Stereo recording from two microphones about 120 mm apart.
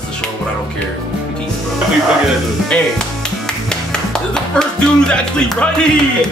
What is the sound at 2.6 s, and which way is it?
Music, 5° left (ahead or behind).